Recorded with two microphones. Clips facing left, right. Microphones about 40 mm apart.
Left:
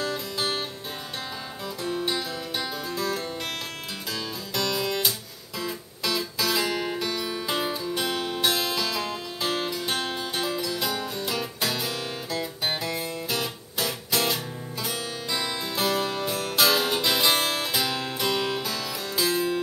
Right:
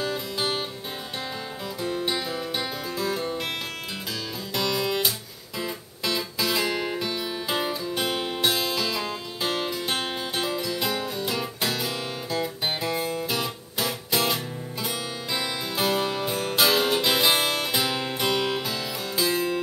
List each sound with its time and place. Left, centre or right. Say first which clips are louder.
0.0 s music: right 1 dB; centre
1.8 s music: right 1 dB; centre
4.6 s music: right 1 dB; centre
8.0 s music: right 2 dB; centre
8.4 s music: even; centre